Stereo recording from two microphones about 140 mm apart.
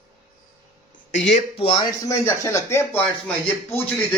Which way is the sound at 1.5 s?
40° left (ahead or behind).